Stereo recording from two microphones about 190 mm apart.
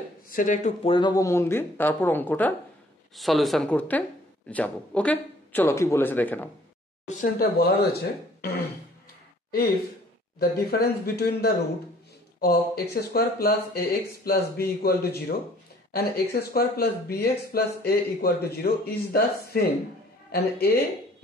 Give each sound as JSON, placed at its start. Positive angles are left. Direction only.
{"t": 0.3, "sound": "speech", "side_deg": 45}
{"t": 0.8, "sound": "speech", "side_deg": 25}
{"t": 7.1, "sound": "speech", "side_deg": 45}